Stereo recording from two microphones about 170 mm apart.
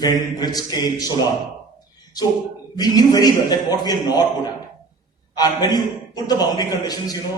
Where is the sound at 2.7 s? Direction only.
20° left (ahead or behind).